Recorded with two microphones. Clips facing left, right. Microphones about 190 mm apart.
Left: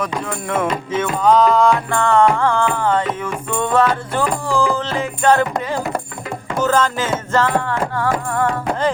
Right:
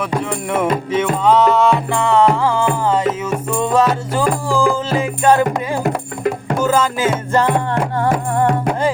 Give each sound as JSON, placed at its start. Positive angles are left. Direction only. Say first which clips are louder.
{"t": 0.3, "sound": "music", "louder": "right 2 dB", "side_deg": -10}
{"t": 6.6, "sound": "music", "louder": "even", "side_deg": -10}